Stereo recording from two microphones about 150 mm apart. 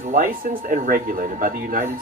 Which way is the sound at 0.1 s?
60° right (ahead or behind).